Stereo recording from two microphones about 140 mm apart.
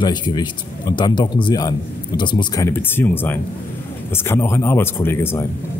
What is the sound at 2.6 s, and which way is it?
Speech, 15° left (ahead or behind).